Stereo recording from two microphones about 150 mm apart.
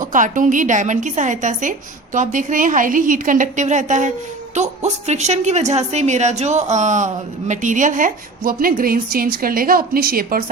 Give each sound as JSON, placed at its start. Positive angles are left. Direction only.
{"t": 0.0, "sound": "a woman's voice", "side_deg": -60}